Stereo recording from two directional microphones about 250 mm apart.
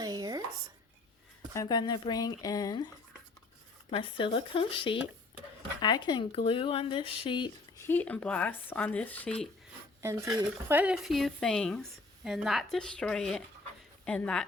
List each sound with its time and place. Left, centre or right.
0.0 s a sound: centre
1.5 s speech: centre
10.0 s speech: centre